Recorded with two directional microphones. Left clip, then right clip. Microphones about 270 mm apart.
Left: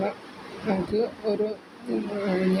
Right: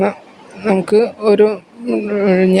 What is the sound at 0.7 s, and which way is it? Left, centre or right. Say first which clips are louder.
Speech: right 13 dB; right.